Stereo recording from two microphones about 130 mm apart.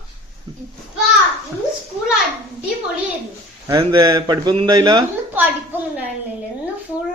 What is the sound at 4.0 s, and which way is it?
Speech, 35° right (ahead or behind).